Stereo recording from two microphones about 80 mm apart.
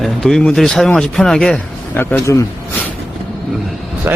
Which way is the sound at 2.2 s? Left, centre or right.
Left.